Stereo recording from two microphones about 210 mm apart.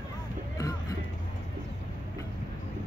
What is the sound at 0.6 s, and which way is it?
Music, 15° left (ahead or behind).